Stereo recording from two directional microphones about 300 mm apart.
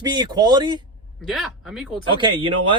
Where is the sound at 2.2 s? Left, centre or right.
Centre.